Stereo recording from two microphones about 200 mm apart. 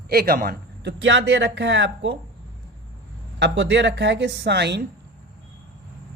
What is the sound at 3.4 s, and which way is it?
Speech, 60° right (ahead or behind).